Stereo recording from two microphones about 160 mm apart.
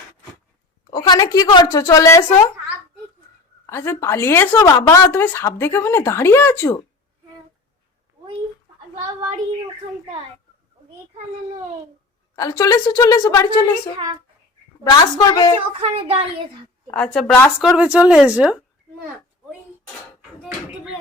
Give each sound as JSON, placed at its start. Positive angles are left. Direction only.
{"t": 0.9, "sound": "a woman's voice", "side_deg": 25}
{"t": 3.7, "sound": "a woman's voice", "side_deg": 15}
{"t": 12.4, "sound": "a woman's voice", "side_deg": 20}
{"t": 14.8, "sound": "a woman's voice", "side_deg": 25}
{"t": 15.8, "sound": "speech", "side_deg": -40}
{"t": 16.9, "sound": "a woman's voice", "side_deg": 5}
{"t": 17.6, "sound": "a woman's voice", "side_deg": -5}